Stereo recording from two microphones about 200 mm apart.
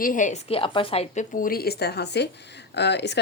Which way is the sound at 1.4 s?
50° left (ahead or behind).